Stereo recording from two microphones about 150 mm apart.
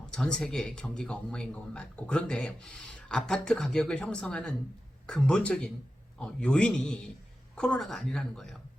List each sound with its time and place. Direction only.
0.1 s speech: 5° left (ahead or behind)